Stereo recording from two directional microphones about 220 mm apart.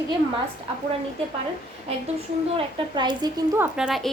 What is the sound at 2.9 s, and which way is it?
A woman's voice, 20° right (ahead or behind).